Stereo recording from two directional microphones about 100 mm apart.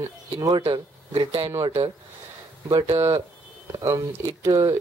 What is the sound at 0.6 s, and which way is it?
Speech, 90° right.